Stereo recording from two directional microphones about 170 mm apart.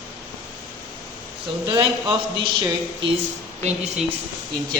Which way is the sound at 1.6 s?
25° right (ahead or behind).